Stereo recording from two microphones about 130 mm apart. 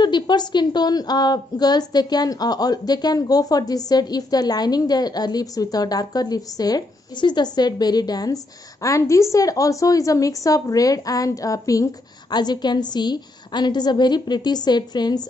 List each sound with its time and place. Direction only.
0.0 s a woman's voice: 35° left (ahead or behind)